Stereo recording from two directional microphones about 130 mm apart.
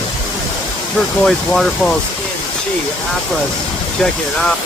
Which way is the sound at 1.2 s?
5° left (ahead or behind).